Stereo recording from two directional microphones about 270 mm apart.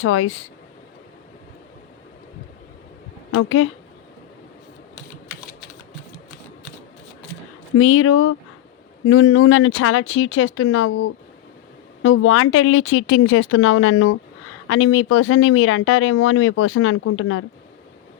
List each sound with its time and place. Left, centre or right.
0.0 s speech: left
3.3 s speech: left
7.8 s speech: left
12.0 s speech: left